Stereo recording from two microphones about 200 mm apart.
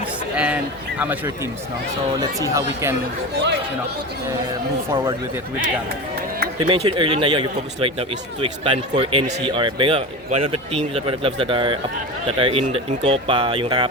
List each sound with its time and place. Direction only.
0.3 s a man's voice: 5° right (ahead or behind)
2.4 s speech: 15° right (ahead or behind)
3.3 s speech: 60° right (ahead or behind)
6.6 s speech: 25° right (ahead or behind)